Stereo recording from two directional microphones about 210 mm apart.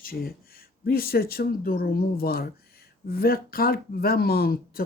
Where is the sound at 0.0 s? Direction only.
45° left (ahead or behind).